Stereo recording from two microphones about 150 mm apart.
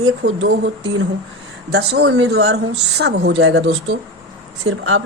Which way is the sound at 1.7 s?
90° right.